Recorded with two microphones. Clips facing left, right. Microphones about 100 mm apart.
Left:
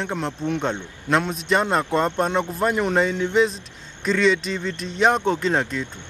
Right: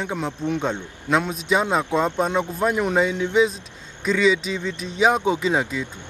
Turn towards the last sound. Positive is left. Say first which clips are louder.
# even
turn(degrees=-5)  # may be behind; listen again after turning